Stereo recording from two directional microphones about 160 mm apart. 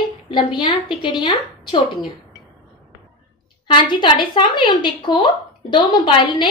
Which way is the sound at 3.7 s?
30° left (ahead or behind).